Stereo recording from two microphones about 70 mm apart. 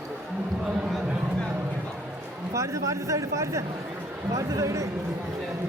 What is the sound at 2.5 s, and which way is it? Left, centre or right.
Speech, right.